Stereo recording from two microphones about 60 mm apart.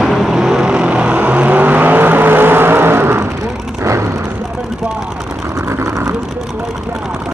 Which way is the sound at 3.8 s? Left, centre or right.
Right.